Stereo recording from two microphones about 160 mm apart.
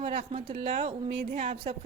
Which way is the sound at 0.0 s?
40° right (ahead or behind).